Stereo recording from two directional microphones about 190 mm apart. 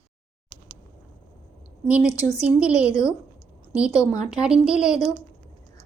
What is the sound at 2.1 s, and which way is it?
Speech, 15° left (ahead or behind).